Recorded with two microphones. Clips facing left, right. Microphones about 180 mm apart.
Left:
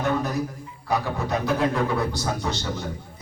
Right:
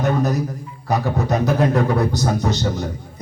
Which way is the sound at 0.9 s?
40° right (ahead or behind).